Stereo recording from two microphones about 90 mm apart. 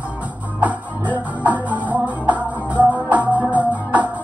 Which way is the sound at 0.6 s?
15° right (ahead or behind).